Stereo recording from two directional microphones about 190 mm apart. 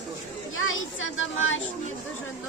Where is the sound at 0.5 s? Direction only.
90° left.